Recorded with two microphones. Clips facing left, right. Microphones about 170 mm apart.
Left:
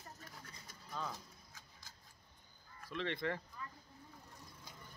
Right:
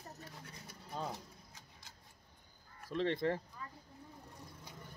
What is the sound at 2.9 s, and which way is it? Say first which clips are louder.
Speech: right 5 dB; 40° right (ahead or behind).